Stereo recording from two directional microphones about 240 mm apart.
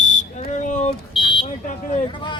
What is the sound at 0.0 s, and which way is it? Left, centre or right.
Smoke detector, left.